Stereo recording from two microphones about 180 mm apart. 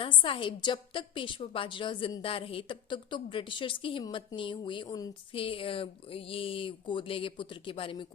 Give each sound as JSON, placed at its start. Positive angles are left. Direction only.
{"t": 0.0, "sound": "a woman's voice", "side_deg": 30}